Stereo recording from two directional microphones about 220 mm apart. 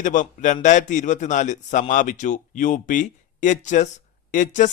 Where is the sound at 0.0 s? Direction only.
35° left (ahead or behind).